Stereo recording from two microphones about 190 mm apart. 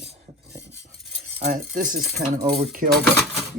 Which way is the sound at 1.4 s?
45° right (ahead or behind).